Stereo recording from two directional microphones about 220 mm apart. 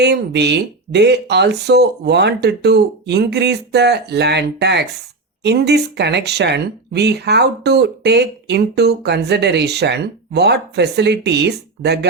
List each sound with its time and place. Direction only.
0.0 s speech: 50° right (ahead or behind)